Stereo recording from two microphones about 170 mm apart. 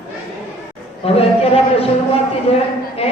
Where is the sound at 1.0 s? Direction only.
35° left (ahead or behind).